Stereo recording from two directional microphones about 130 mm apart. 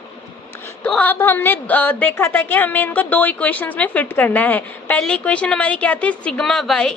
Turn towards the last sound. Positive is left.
turn(degrees=5)  # may be behind; listen again after turning